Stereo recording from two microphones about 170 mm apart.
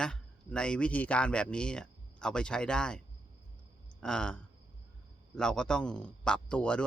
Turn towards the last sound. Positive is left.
turn(degrees=5)  # may be behind; listen again after turning